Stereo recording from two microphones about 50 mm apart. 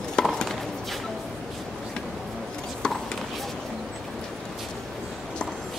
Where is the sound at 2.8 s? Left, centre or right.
Centre.